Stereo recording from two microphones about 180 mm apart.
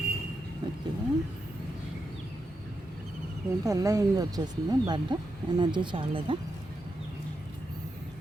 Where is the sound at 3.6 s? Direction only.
20° right (ahead or behind).